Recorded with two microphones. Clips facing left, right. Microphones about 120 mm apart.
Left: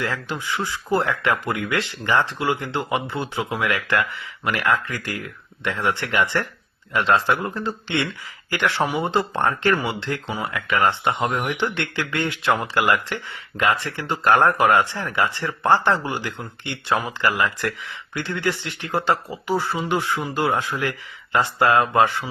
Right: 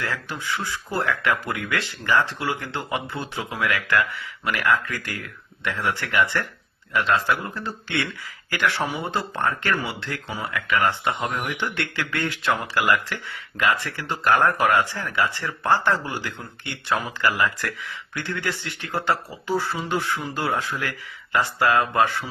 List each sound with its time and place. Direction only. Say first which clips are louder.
0.0 s speech: left 3 dB; 15° left (ahead or behind)